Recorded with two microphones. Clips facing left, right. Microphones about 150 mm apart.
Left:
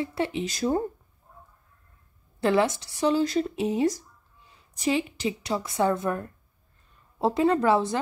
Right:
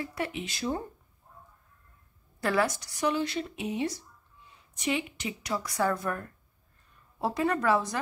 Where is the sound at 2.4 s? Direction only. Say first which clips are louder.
Left 5 dB; 25° left (ahead or behind).